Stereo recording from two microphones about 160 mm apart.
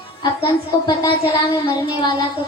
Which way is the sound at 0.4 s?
30° left (ahead or behind).